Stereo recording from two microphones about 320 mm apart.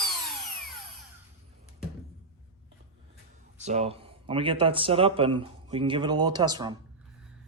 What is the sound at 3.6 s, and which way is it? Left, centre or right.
Speech, right.